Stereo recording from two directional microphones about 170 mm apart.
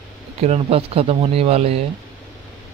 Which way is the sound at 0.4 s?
35° right (ahead or behind).